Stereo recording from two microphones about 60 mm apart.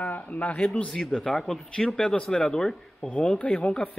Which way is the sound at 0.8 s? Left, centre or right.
Centre.